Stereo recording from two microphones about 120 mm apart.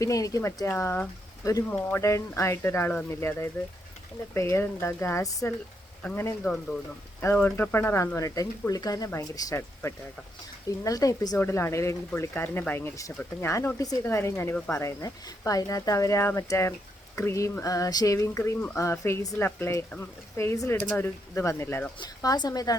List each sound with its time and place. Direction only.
0.0 s speech: 30° left (ahead or behind)
6.0 s speech: 10° left (ahead or behind); by 11.3 s 30° left (ahead or behind)
11.3 s speech: 20° left (ahead or behind)
21.9 s a woman's voice: 35° left (ahead or behind)